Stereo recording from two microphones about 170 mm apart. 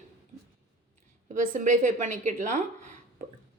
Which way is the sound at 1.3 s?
50° right (ahead or behind).